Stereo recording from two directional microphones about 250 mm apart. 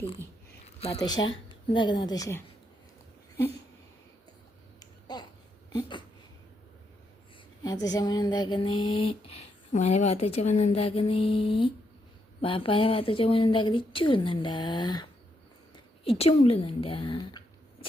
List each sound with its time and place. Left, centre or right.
0.6 s a woman's voice: left
4.8 s finger snapping: centre
7.6 s a sound: centre
9.7 s a woman's voice: left